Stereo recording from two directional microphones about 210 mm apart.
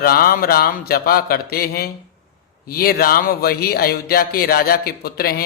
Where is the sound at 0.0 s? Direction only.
45° left (ahead or behind).